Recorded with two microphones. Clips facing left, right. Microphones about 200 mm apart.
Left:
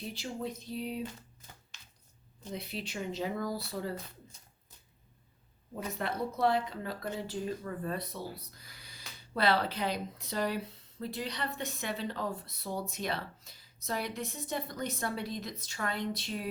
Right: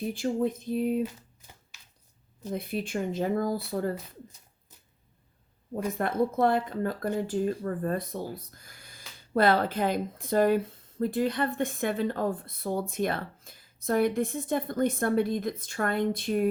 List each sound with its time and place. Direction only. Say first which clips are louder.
0.0 s speech: right 10 dB; 50° right (ahead or behind)
2.4 s speech: right 8 dB; 50° right (ahead or behind)
5.7 s speech: right 8 dB; 50° right (ahead or behind)